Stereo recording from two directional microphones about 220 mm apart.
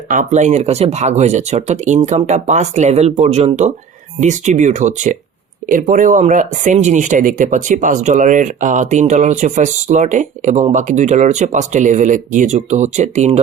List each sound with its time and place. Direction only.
0.1 s speech: 35° right (ahead or behind)